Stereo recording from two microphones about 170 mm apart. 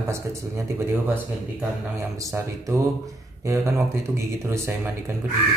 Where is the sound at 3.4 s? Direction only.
20° right (ahead or behind).